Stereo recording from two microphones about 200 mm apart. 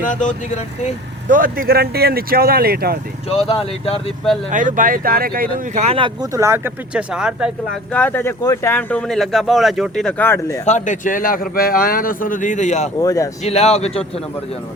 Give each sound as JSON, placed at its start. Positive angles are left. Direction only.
{"t": 0.0, "sound": "a man's voice", "side_deg": 40}
{"t": 1.3, "sound": "speech", "side_deg": -45}
{"t": 3.2, "sound": "speech", "side_deg": 30}
{"t": 4.5, "sound": "speech", "side_deg": -40}
{"t": 5.7, "sound": "speech", "side_deg": -30}
{"t": 6.3, "sound": "speech", "side_deg": -15}
{"t": 7.9, "sound": "speech", "side_deg": 10}
{"t": 10.7, "sound": "a man's voice", "side_deg": 35}
{"t": 13.0, "sound": "speech", "side_deg": 15}
{"t": 13.4, "sound": "a man's voice", "side_deg": 30}